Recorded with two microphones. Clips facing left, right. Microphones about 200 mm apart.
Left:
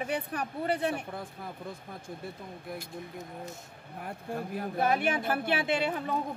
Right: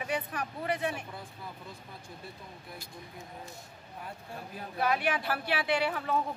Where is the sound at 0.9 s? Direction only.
50° left (ahead or behind).